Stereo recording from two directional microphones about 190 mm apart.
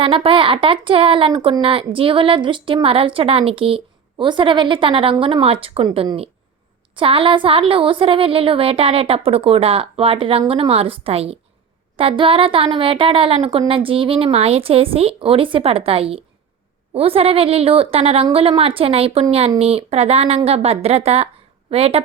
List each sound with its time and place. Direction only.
0.0 s a woman's voice: 30° right (ahead or behind)